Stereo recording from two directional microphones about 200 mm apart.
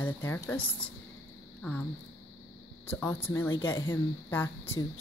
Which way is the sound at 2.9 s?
10° left (ahead or behind).